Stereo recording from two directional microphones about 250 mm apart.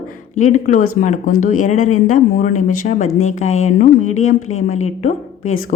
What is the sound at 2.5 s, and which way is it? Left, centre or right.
Speech, left.